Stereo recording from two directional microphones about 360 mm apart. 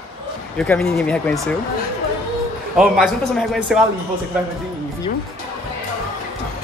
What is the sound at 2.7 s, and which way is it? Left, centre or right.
Speech, centre.